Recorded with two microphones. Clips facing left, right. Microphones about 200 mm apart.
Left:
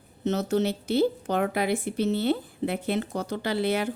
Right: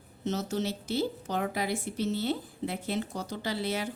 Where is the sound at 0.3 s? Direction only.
60° left (ahead or behind).